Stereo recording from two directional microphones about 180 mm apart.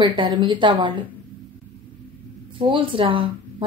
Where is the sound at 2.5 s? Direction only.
30° right (ahead or behind).